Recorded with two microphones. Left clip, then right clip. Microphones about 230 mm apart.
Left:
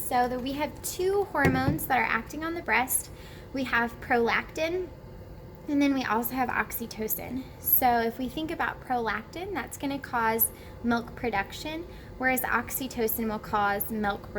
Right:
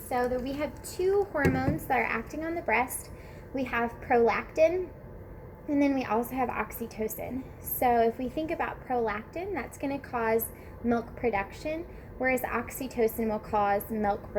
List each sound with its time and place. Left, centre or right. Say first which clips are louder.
0.1 s a woman's voice: left 2 dB; centre